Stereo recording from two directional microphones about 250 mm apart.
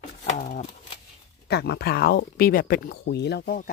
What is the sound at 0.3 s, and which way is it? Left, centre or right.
Speech, left.